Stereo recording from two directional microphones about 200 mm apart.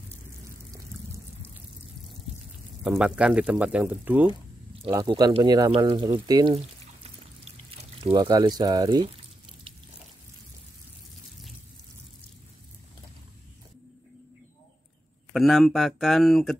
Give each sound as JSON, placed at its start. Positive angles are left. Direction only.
{"t": 2.8, "sound": "speech", "side_deg": -5}
{"t": 4.8, "sound": "speech", "side_deg": -20}
{"t": 6.1, "sound": "pour", "side_deg": -20}
{"t": 8.0, "sound": "speech", "side_deg": -25}
{"t": 15.3, "sound": "speech", "side_deg": 0}